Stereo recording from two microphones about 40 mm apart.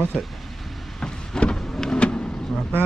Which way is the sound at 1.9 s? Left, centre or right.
Left.